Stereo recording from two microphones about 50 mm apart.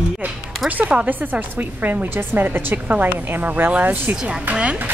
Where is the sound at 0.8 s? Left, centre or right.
Right.